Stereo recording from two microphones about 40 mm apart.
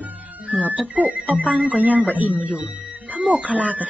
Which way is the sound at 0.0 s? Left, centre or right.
Right.